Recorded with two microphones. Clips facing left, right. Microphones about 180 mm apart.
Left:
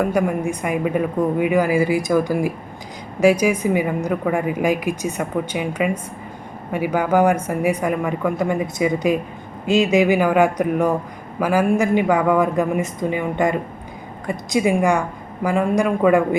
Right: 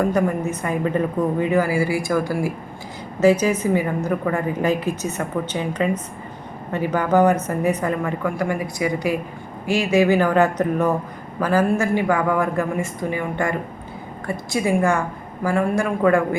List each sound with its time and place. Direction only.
0.0 s a woman's voice: 10° left (ahead or behind)